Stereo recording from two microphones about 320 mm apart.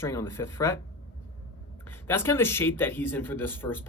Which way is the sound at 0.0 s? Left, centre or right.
Centre.